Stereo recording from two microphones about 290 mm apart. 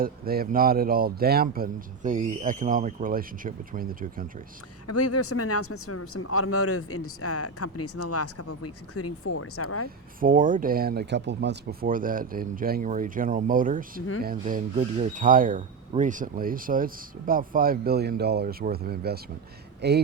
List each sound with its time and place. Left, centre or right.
0.0 s speech: right
4.9 s speech: left
10.2 s a man's voice: right